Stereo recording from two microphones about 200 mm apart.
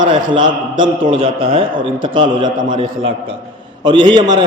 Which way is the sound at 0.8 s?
25° right (ahead or behind).